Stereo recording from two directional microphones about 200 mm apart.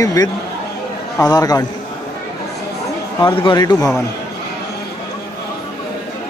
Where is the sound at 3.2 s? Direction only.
20° left (ahead or behind).